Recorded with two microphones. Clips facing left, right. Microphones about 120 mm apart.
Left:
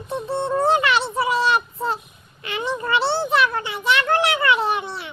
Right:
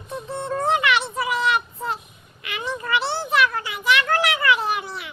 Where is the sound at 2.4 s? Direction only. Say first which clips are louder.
Left 4 dB; 30° left (ahead or behind).